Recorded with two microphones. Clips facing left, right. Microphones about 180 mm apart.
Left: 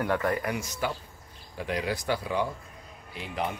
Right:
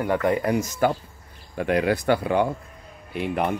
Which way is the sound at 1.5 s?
60° right (ahead or behind).